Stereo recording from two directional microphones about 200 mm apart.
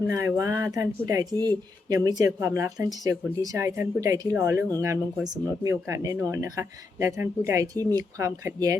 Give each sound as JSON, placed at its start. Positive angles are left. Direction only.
{"t": 0.1, "sound": "speech", "side_deg": -15}